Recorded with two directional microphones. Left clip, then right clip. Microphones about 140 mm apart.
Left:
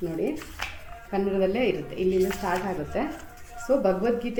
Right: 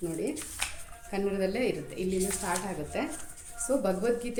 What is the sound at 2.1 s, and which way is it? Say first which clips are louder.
Speech: left 8 dB; 10° left (ahead or behind).